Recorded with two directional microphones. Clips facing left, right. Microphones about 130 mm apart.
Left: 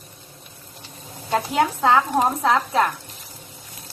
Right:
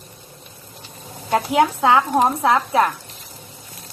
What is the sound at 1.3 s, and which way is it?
Speech, 15° right (ahead or behind).